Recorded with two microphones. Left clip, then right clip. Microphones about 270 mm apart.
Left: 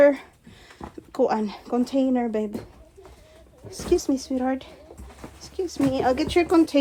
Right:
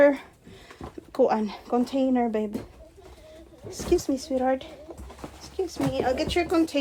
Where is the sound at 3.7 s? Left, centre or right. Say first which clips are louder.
Left 2 dB; centre.